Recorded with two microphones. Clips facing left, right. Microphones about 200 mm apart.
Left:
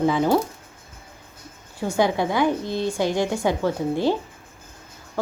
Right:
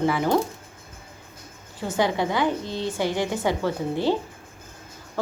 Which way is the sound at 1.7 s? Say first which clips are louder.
Left 2 dB; 10° left (ahead or behind).